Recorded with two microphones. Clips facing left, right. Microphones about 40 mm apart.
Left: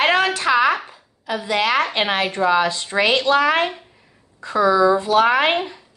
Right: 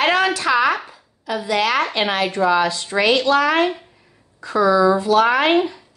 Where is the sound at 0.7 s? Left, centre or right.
Centre.